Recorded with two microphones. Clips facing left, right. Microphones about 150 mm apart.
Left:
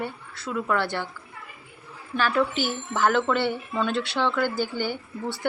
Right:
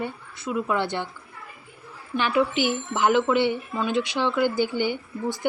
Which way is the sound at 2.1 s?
15° right (ahead or behind).